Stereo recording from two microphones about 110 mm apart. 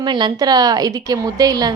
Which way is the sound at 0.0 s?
45° right (ahead or behind).